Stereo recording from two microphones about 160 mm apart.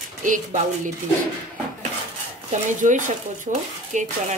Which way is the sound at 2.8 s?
50° right (ahead or behind).